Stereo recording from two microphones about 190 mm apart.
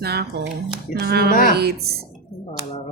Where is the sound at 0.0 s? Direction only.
55° right (ahead or behind).